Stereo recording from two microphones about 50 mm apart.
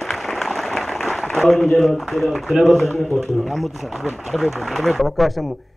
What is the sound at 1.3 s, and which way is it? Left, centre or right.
A man's voice, centre.